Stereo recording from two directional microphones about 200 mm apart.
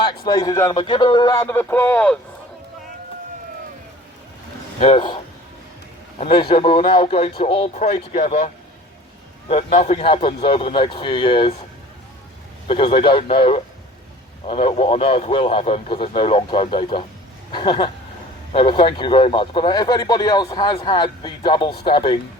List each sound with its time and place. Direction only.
0.0 s speech: 20° left (ahead or behind)
4.8 s speech: 30° left (ahead or behind)
9.5 s speech: 35° left (ahead or behind)
12.6 s speech: 25° left (ahead or behind)